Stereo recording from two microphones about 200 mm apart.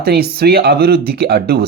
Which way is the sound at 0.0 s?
50° right (ahead or behind).